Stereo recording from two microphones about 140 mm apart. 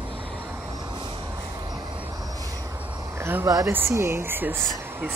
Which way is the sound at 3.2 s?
20° right (ahead or behind).